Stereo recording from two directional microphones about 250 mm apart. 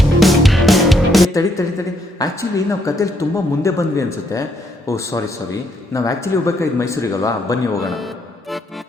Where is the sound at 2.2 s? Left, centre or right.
Centre.